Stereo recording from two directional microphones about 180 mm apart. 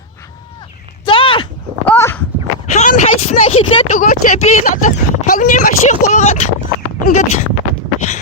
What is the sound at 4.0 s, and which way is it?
Speech, 45° left (ahead or behind).